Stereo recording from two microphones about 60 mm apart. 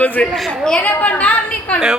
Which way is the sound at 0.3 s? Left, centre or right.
Centre.